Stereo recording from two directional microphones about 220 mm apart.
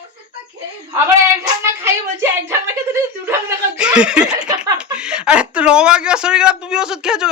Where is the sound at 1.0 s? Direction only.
10° right (ahead or behind).